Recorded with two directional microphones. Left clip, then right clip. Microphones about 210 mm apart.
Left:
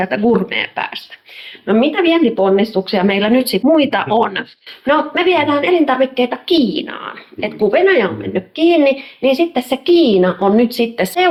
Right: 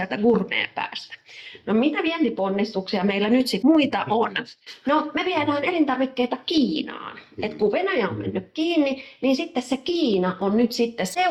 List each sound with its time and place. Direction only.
0.0 s a woman's voice: 20° left (ahead or behind)